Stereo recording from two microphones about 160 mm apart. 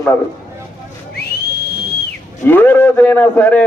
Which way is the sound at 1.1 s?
80° left.